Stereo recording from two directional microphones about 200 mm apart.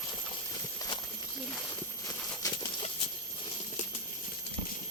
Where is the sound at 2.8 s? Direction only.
30° left (ahead or behind).